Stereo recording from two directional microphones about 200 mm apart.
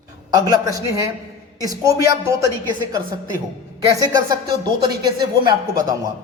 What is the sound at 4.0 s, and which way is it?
Speech, 20° right (ahead or behind).